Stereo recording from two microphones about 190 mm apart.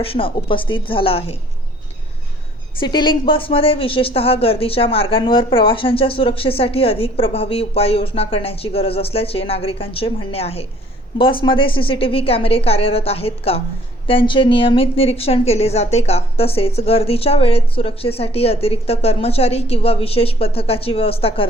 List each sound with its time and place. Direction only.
0.0 s speech: 30° left (ahead or behind)
2.8 s a woman's voice: 25° left (ahead or behind)